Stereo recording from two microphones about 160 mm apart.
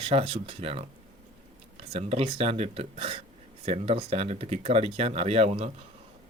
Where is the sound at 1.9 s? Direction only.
40° right (ahead or behind).